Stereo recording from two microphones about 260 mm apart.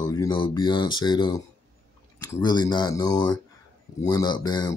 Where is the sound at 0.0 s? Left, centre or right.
Centre.